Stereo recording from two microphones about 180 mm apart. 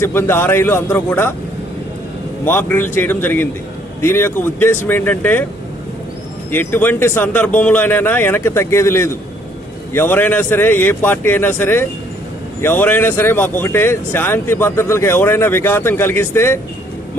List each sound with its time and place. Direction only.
0.0 s speech: 15° left (ahead or behind)
2.4 s speech: 10° left (ahead or behind)
6.5 s speech: 10° left (ahead or behind)